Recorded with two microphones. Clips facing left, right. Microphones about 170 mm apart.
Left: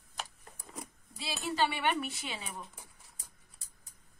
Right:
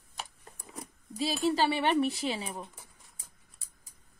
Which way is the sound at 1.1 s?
40° right (ahead or behind).